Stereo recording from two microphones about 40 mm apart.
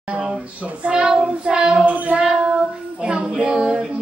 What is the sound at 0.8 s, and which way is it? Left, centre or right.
Child singing, right.